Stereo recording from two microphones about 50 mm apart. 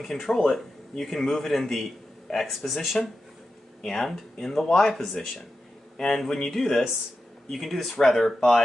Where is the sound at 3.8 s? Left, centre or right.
Centre.